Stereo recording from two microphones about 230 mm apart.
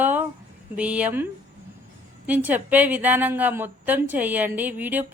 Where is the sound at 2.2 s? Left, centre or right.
Centre.